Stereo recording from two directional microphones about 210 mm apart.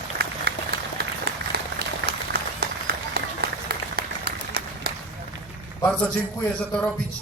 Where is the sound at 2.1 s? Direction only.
50° right (ahead or behind).